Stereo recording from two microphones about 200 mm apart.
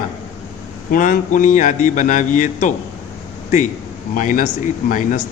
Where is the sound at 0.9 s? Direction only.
40° left (ahead or behind).